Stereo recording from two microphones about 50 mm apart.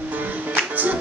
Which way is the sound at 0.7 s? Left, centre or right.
Right.